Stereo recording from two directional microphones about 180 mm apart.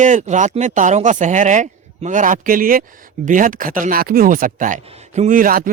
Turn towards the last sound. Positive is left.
turn(degrees=-50)  # may be behind; listen again after turning